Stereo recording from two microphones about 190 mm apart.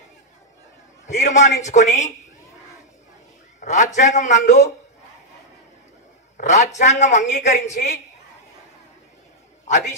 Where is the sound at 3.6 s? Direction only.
40° left (ahead or behind).